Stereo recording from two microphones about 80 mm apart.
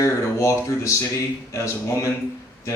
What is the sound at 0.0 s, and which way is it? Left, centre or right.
Speech, left.